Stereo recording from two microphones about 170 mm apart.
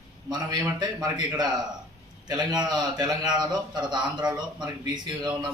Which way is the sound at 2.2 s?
25° right (ahead or behind).